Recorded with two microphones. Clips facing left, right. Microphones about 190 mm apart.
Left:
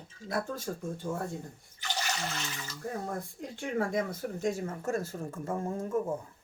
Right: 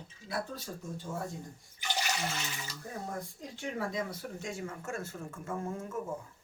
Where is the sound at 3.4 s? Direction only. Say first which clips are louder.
Left 7 dB; 55° left (ahead or behind); by 6.0 s 35° left (ahead or behind).